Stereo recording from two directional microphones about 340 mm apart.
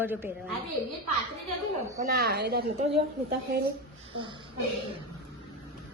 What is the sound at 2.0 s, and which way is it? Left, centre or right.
Speech, right.